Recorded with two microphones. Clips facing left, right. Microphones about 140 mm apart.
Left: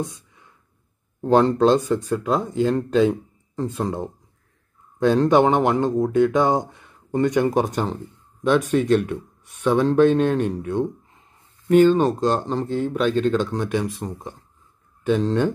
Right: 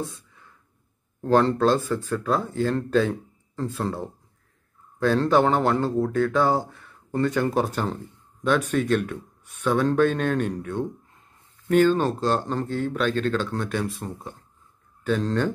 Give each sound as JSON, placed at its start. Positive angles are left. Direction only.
{"t": 1.2, "sound": "speech", "side_deg": 20}
{"t": 2.9, "sound": "a sound", "side_deg": 20}
{"t": 3.7, "sound": "speech", "side_deg": 15}
{"t": 5.3, "sound": "speech", "side_deg": 20}
{"t": 15.0, "sound": "speech", "side_deg": 15}